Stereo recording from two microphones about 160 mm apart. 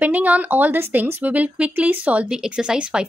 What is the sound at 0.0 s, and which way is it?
A woman's voice, 10° right (ahead or behind).